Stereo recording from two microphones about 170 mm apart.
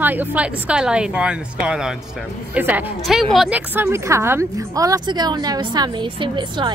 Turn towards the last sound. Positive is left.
turn(degrees=-30)  # may be behind; listen again after turning